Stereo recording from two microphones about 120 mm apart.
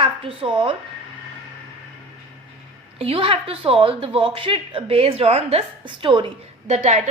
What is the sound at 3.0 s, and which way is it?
A woman's voice, 50° right (ahead or behind).